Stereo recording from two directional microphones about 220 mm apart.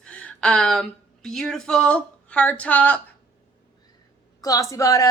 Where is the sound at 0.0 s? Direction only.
5° left (ahead or behind).